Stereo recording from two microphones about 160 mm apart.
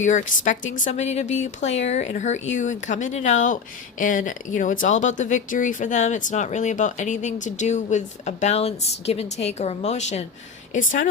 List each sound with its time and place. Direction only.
0.0 s speech: 50° left (ahead or behind)
10.8 s a woman's voice: 55° left (ahead or behind)